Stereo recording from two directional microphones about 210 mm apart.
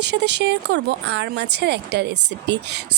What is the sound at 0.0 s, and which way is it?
Speech, 55° right (ahead or behind).